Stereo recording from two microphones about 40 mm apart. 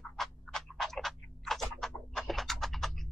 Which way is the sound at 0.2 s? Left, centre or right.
Centre.